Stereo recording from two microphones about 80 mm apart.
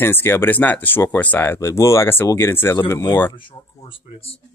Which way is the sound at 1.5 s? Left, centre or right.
Left.